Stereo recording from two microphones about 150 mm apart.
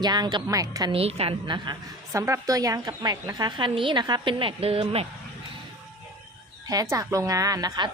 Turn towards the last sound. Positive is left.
turn(degrees=-25)  # may be behind; listen again after turning